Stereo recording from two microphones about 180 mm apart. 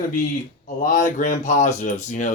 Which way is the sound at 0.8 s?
45° left (ahead or behind).